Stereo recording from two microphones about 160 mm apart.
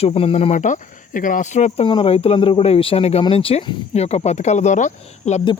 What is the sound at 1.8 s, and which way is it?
Speech, 35° left (ahead or behind).